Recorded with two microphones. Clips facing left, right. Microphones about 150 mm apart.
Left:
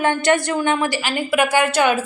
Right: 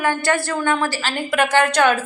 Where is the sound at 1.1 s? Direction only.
10° left (ahead or behind).